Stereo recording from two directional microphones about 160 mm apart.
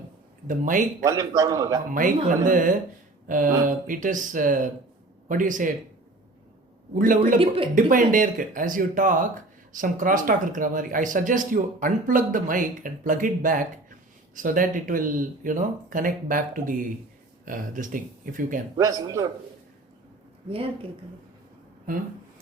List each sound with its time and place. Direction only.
0.4 s speech: 55° right (ahead or behind)
1.0 s a man's voice: 20° right (ahead or behind)
1.9 s speech: 55° right (ahead or behind)
6.9 s speech: 55° right (ahead or behind)
7.3 s speech: 35° right (ahead or behind)
7.8 s speech: 55° right (ahead or behind)
18.8 s a man's voice: 20° right (ahead or behind)